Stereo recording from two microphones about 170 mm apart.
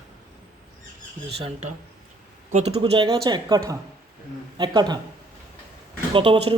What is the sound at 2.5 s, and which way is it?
Speech, 40° right (ahead or behind).